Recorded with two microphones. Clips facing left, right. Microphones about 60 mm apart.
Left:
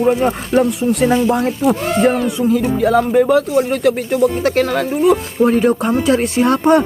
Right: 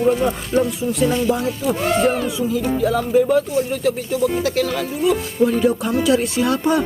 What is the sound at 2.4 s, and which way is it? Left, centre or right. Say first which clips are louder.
Speech: left 5 dB; left.